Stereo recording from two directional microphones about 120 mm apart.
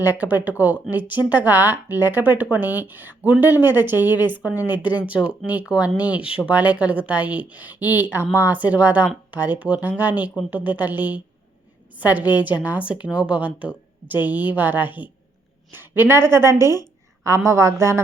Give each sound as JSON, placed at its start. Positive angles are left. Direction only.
{"t": 0.0, "sound": "speech", "side_deg": -15}
{"t": 7.8, "sound": "speech", "side_deg": 35}
{"t": 8.0, "sound": "a woman's voice", "side_deg": -15}